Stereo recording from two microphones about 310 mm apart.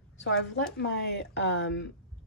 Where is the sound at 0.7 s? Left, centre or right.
Left.